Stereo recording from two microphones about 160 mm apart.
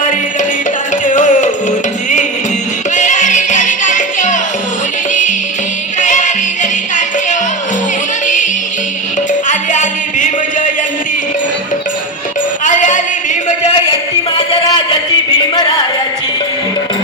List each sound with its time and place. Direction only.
1.0 s music: 50° left (ahead or behind)
2.9 s music: 50° left (ahead or behind)
6.0 s music: 50° left (ahead or behind)
9.5 s music: 50° left (ahead or behind)
12.6 s a sound: 50° left (ahead or behind)
14.3 s a sound: 30° left (ahead or behind)